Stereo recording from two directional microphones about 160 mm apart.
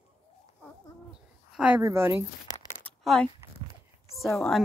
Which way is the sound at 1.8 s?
15° right (ahead or behind).